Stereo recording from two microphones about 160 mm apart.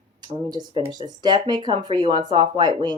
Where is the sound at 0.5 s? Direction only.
25° right (ahead or behind).